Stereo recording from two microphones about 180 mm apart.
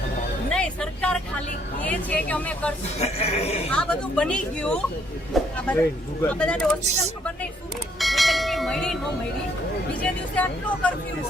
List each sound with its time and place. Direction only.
0.5 s speech: 5° left (ahead or behind)
3.0 s music: 35° left (ahead or behind)
3.7 s speech: 5° left (ahead or behind)
7.9 s bell: centre (ahead or behind)
10.0 s speech: 10° left (ahead or behind)